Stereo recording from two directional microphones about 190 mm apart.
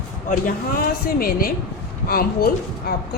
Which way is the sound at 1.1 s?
50° left (ahead or behind).